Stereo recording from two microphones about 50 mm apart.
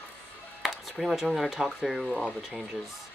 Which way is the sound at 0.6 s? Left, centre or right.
Centre.